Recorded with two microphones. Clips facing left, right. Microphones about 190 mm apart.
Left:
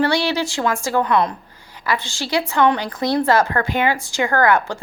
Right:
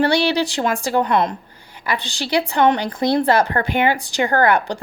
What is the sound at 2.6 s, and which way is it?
A woman's voice, 25° right (ahead or behind).